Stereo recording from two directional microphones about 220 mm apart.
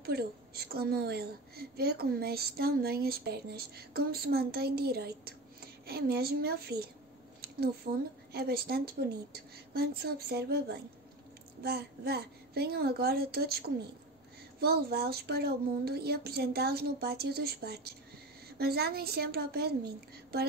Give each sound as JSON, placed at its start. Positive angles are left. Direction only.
{"t": 0.0, "sound": "a woman's voice", "side_deg": -45}